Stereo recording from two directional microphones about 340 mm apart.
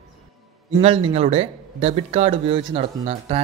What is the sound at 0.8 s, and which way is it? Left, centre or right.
Speech, centre.